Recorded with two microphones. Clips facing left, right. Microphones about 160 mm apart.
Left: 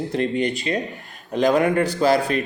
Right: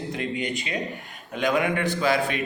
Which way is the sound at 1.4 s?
40° left (ahead or behind).